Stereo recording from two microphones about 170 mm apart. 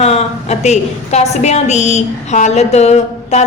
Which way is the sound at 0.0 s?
40° left (ahead or behind).